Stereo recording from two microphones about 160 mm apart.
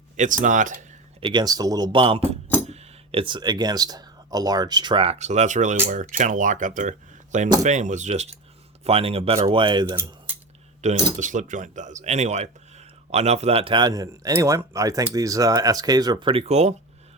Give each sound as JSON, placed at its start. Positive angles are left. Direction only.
{"t": 0.2, "sound": "speech", "side_deg": -55}
{"t": 1.2, "sound": "speech", "side_deg": -30}
{"t": 9.8, "sound": "speech", "side_deg": -15}
{"t": 10.8, "sound": "speech", "side_deg": -50}